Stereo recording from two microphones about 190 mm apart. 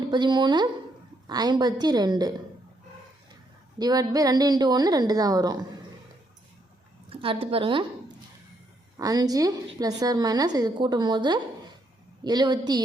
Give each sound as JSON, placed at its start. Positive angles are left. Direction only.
{"t": 0.1, "sound": "a woman's voice", "side_deg": -25}
{"t": 3.8, "sound": "a woman's voice", "side_deg": -20}
{"t": 7.1, "sound": "a woman's voice", "side_deg": -30}
{"t": 9.0, "sound": "a woman's voice", "side_deg": -20}